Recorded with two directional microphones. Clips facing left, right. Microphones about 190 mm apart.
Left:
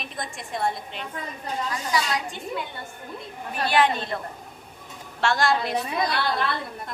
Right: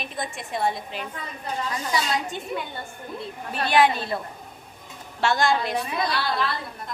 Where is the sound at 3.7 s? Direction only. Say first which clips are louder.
Right 2 dB; 10° right (ahead or behind).